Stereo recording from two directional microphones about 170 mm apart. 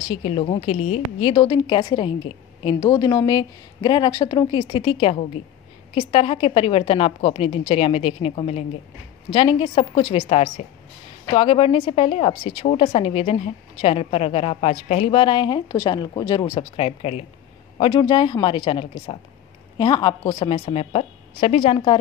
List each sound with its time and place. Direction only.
0.1 s a woman's voice: 35° left (ahead or behind)